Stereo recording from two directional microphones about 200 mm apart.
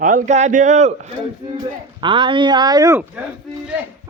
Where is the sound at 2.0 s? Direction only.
25° right (ahead or behind).